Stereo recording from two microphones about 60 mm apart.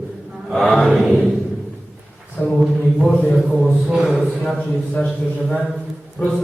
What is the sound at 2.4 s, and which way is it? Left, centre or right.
Speech, left.